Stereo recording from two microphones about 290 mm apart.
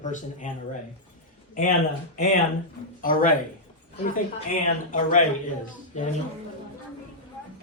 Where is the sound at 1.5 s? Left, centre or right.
Left.